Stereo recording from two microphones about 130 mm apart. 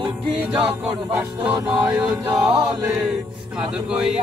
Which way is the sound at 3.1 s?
5° right (ahead or behind).